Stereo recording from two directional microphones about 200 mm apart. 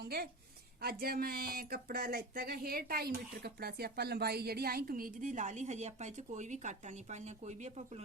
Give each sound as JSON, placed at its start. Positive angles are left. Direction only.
{"t": 0.0, "sound": "a woman's voice", "side_deg": -50}